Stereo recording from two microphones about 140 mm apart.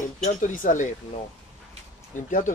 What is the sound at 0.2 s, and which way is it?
Speech, 70° left (ahead or behind).